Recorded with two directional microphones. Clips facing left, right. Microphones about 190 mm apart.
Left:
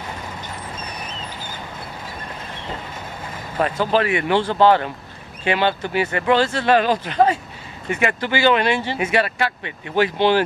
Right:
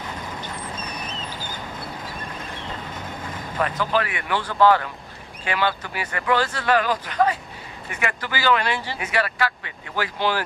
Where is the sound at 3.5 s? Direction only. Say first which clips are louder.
Left 4 dB; 25° left (ahead or behind).